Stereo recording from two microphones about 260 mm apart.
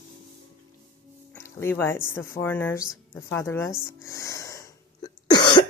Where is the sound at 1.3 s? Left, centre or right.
Centre.